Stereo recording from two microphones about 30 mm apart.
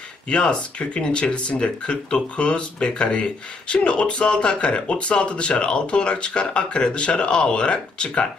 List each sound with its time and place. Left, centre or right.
0.3 s speech: left